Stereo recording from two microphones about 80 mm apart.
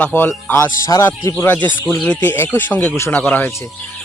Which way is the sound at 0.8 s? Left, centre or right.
Left.